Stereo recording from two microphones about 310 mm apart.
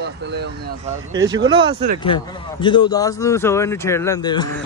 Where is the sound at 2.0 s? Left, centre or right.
Centre.